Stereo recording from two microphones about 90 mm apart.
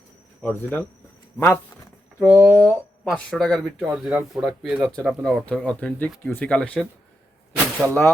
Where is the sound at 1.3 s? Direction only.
25° left (ahead or behind).